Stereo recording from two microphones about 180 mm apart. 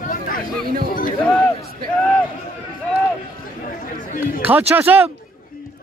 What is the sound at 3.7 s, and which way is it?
Chatter, 50° left (ahead or behind).